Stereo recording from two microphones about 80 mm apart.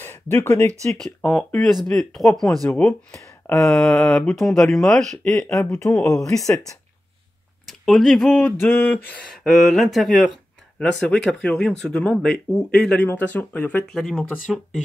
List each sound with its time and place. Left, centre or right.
0.0 s speech: left
0.9 s speech: centre
2.8 s speech: centre
3.5 s speech: centre
6.3 s speech: left
7.6 s speech: centre
8.5 s speech: left
9.3 s speech: centre
10.8 s speech: centre
13.0 s speech: left
13.8 s speech: centre